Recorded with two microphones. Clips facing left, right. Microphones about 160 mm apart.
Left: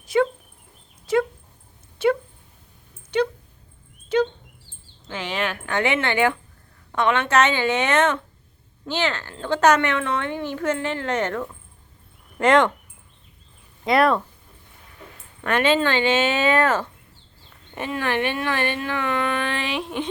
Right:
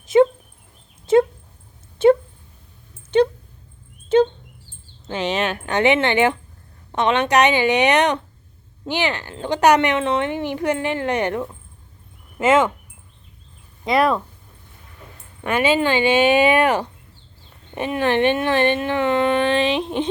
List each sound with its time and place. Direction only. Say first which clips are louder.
0.0 s dog: right 6 dB; 20° right (ahead or behind)
2.0 s a sound: right 7 dB; 25° right (ahead or behind)
5.0 s speech: right 5 dB; 20° right (ahead or behind)
12.4 s speech: right 1 dB; 5° right (ahead or behind)
13.8 s speech: even; centre (ahead or behind)
15.4 s speech: right 2 dB; 10° right (ahead or behind)